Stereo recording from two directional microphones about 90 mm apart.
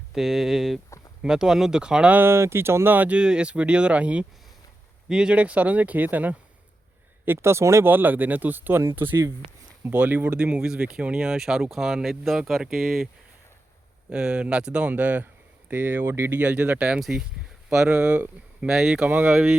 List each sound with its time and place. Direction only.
0.1 s speech: 5° right (ahead or behind)
2.1 s speech: 25° right (ahead or behind)
7.3 s speech: 30° right (ahead or behind); by 13.1 s 5° right (ahead or behind)
14.1 s speech: 10° right (ahead or behind); by 16.4 s 25° right (ahead or behind)
16.4 s speech: 15° right (ahead or behind)
19.0 s speech: 15° right (ahead or behind)